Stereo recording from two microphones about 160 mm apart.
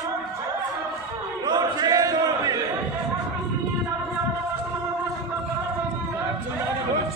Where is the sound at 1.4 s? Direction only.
25° right (ahead or behind).